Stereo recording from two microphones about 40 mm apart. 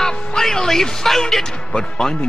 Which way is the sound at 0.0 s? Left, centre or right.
Centre.